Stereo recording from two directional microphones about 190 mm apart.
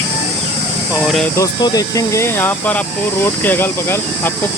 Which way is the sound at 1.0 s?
Centre (ahead or behind).